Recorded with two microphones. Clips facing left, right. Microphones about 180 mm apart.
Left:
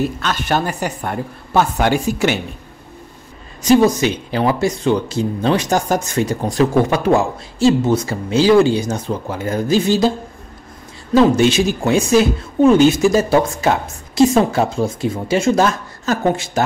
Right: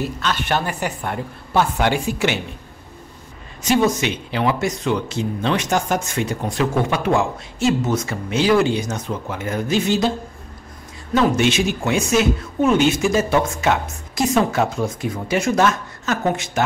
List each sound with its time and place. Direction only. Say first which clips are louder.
0.2 s a woman's voice: left 3 dB; 45° left (ahead or behind)
3.6 s speech: left 5 dB; 35° left (ahead or behind)
11.1 s speech: left 5 dB; 35° left (ahead or behind)